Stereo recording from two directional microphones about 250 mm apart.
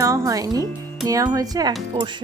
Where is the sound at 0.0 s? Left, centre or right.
Centre.